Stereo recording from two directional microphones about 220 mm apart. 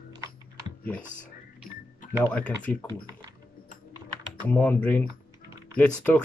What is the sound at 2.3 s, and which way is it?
Speech, 5° left (ahead or behind).